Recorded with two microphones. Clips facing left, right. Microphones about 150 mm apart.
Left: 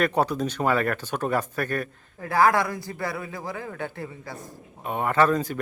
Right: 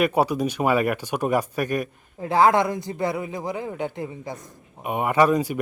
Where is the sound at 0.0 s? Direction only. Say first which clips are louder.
Right 3 dB; 10° right (ahead or behind).